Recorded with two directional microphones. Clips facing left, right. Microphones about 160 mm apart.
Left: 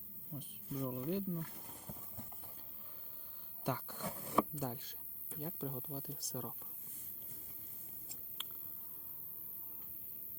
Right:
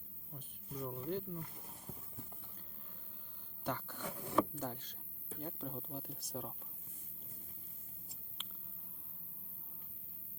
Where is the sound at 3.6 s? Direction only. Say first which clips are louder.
Left 1 dB; 10° left (ahead or behind).